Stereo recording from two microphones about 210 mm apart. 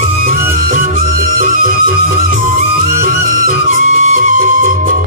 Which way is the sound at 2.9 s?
65° left (ahead or behind).